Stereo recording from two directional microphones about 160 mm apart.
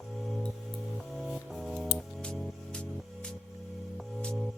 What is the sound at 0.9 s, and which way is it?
Music, centre (ahead or behind).